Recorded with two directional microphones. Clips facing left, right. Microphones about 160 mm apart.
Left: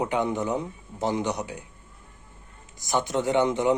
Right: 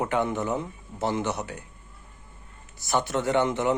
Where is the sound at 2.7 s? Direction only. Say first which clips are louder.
Even; 15° left (ahead or behind).